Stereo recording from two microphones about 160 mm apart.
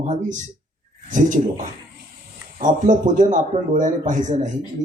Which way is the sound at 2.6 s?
50° right (ahead or behind).